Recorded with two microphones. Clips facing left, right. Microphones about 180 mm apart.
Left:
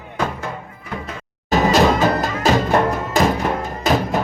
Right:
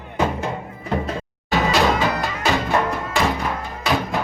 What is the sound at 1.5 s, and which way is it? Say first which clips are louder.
Music: left 4 dB; 45° left (ahead or behind).